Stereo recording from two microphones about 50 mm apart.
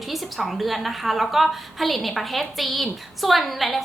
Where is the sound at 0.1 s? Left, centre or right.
Centre.